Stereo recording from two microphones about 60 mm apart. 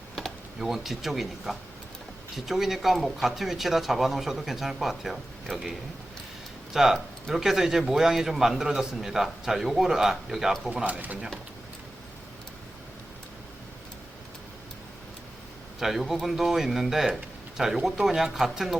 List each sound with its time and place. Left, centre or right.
0.6 s speech: centre
6.7 s speech: centre
10.8 s speech: right
15.8 s speech: centre